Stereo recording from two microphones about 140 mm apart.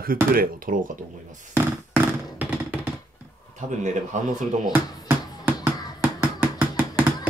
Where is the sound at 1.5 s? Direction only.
15° right (ahead or behind).